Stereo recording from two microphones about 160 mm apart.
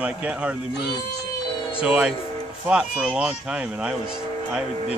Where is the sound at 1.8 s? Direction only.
5° right (ahead or behind).